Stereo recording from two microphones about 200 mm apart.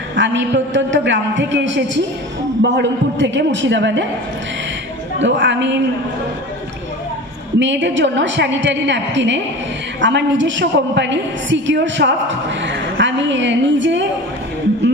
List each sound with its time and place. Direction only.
0.1 s a woman's voice: 65° right (ahead or behind)
5.2 s a woman's voice: 65° right (ahead or behind)
7.5 s a woman's voice: 65° right (ahead or behind)